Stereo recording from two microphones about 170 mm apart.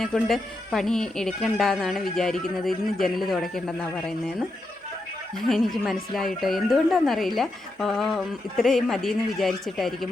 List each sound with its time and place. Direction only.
0.0 s speech: centre (ahead or behind)
5.5 s speech: centre (ahead or behind)